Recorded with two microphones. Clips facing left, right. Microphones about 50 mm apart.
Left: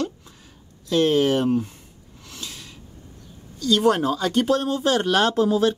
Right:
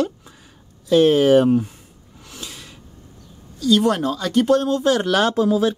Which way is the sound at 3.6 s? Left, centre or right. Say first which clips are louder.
Right 2 dB; centre.